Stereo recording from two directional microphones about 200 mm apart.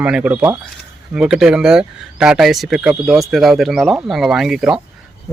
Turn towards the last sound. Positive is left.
turn(degrees=0)  # may be behind; listen again after turning